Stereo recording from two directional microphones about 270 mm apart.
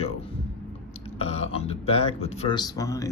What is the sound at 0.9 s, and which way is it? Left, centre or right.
Speech, left.